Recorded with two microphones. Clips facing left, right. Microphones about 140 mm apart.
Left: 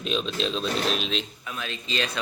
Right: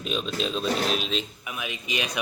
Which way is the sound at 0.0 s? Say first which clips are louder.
Left 1 dB; 5° right (ahead or behind).